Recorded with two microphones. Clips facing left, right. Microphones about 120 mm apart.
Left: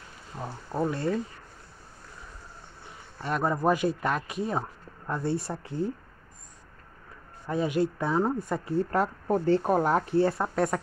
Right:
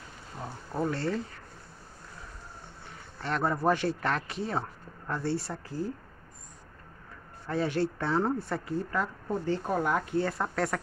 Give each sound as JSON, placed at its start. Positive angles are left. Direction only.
{"t": 0.4, "sound": "speech", "side_deg": 10}
{"t": 3.2, "sound": "speech", "side_deg": 15}
{"t": 7.4, "sound": "speech", "side_deg": 15}
{"t": 8.9, "sound": "speech", "side_deg": 65}
{"t": 9.8, "sound": "speech", "side_deg": 35}